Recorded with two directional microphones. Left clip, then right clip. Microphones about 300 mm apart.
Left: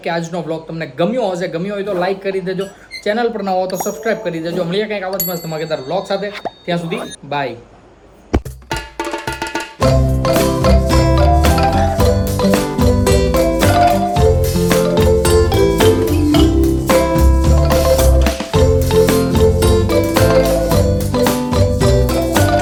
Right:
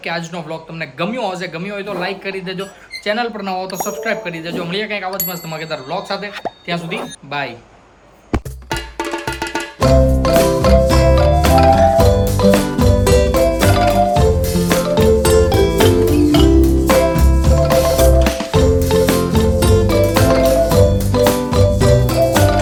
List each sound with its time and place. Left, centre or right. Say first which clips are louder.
0.0 s a man's voice: left 3 dB; centre
9.0 s music: even; centre